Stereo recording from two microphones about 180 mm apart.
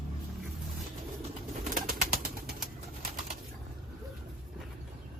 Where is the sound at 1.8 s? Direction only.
55° right (ahead or behind).